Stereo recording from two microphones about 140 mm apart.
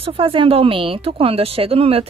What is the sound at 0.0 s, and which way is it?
Speech, 40° right (ahead or behind).